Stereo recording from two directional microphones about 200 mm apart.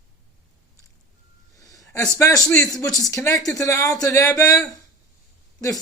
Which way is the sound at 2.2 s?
15° left (ahead or behind).